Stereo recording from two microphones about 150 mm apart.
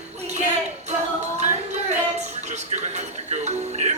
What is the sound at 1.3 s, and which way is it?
Music, 50° right (ahead or behind).